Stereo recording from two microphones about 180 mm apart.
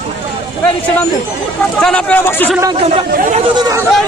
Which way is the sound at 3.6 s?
20° right (ahead or behind).